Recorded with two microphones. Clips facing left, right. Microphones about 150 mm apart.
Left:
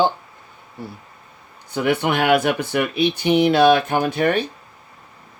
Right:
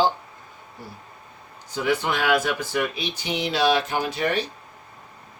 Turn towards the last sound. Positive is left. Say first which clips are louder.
# left 5 dB
turn(degrees=55)  # may be behind; listen again after turning